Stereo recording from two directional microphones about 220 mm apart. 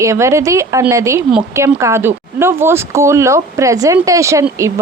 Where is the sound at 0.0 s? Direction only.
15° right (ahead or behind).